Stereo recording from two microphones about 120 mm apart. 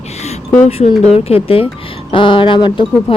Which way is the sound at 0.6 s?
60° left (ahead or behind).